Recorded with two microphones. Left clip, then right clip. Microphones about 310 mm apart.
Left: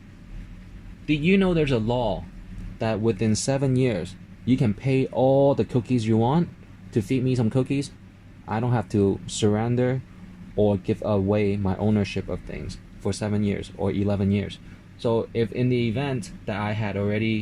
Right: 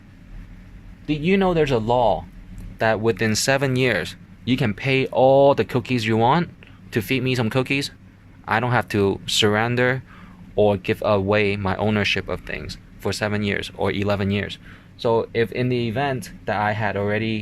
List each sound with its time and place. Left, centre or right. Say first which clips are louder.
1.2 s speech: right 4 dB; right
1.9 s speech: right 7 dB; right
2.7 s speech: right 5 dB; right
5.1 s speech: right 5 dB; right
5.5 s speech: right 3 dB; right
10.5 s speech: right 4 dB; right
11.3 s speech: right 4 dB; right
11.6 s speech: right 4 dB; right
11.9 s speech: right 7 dB; right